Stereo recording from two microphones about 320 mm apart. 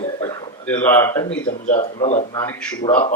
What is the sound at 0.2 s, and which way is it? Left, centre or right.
Speech, centre.